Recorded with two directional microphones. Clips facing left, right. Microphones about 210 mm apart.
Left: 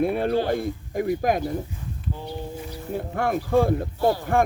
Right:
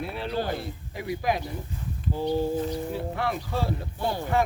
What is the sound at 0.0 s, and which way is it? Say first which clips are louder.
Speech: left 8 dB; 50° left (ahead or behind).